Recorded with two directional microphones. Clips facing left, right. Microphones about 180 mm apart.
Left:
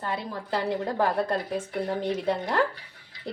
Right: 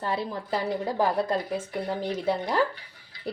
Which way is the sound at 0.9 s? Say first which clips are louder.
Right 2 dB; 10° right (ahead or behind).